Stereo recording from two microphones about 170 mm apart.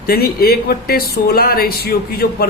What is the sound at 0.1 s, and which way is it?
Speech, 65° left (ahead or behind).